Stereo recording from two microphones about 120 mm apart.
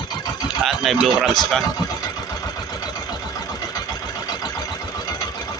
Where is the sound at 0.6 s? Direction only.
Centre (ahead or behind).